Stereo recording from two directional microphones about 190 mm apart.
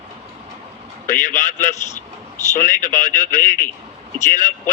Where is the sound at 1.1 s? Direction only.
45° left (ahead or behind).